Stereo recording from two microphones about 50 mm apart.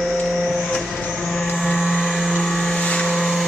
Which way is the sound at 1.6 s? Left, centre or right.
Centre.